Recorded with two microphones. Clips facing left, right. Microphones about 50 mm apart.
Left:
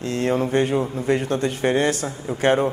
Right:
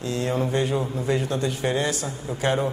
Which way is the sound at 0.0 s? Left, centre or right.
Left.